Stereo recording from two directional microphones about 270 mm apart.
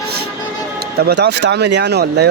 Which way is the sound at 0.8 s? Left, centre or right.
Right.